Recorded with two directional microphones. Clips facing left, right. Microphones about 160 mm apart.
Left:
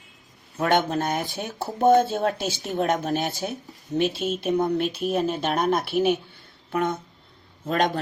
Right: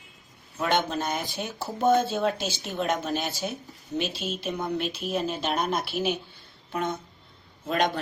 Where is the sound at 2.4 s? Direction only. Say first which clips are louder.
Left 4 dB; centre (ahead or behind).